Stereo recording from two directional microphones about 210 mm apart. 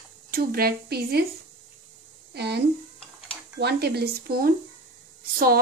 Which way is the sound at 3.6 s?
50° right (ahead or behind).